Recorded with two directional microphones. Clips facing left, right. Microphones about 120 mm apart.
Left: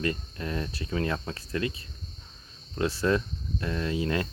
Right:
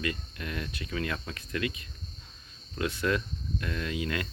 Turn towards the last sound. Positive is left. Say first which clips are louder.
# left 4 dB
turn(degrees=30)  # may be behind; listen again after turning